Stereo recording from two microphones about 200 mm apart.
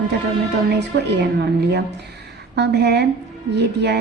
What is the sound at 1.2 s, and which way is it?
A woman's voice, 55° right (ahead or behind).